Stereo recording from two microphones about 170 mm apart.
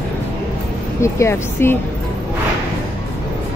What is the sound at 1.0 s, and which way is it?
Speech, 15° left (ahead or behind).